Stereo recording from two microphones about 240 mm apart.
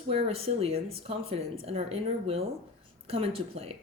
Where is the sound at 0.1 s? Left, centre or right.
Right.